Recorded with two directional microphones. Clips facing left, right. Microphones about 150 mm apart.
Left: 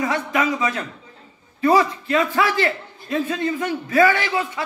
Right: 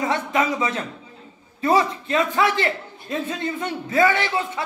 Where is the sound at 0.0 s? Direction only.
25° right (ahead or behind).